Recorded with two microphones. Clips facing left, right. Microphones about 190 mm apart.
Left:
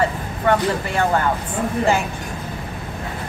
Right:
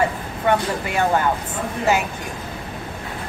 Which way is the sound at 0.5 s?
15° right (ahead or behind).